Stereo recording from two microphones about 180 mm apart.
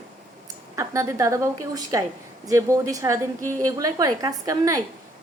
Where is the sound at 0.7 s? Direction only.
15° right (ahead or behind).